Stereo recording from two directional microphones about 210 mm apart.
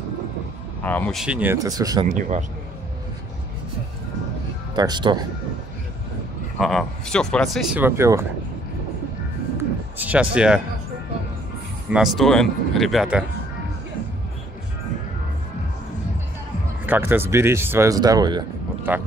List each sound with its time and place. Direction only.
0.8 s speech: 5° left (ahead or behind)
1.2 s speech: 5° right (ahead or behind)
2.0 s speech: 35° right (ahead or behind)
4.7 s speech: 20° right (ahead or behind)
6.6 s speech: centre (ahead or behind)
9.6 s a sound: 5° right (ahead or behind)
11.9 s speech: centre (ahead or behind)
16.8 s speech: 10° right (ahead or behind)
18.9 s speech: 10° right (ahead or behind)